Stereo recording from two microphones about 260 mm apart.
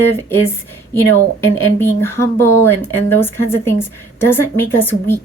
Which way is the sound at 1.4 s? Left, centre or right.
Right.